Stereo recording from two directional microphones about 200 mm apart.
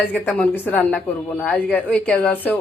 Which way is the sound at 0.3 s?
5° left (ahead or behind).